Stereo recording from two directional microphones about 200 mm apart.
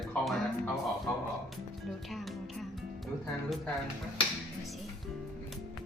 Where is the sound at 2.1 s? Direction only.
Centre (ahead or behind).